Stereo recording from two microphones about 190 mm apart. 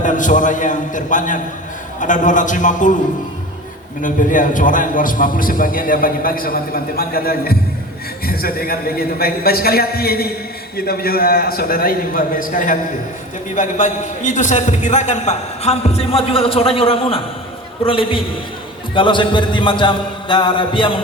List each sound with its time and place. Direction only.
0.0 s a man's voice: 40° left (ahead or behind)
4.0 s a man's voice: 45° left (ahead or behind)
17.8 s music: 30° left (ahead or behind)